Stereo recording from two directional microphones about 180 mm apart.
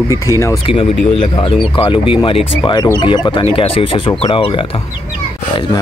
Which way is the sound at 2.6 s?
20° left (ahead or behind).